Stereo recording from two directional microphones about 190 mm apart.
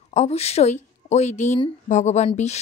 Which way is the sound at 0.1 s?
35° left (ahead or behind).